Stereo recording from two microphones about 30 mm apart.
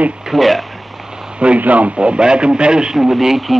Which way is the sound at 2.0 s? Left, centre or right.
Right.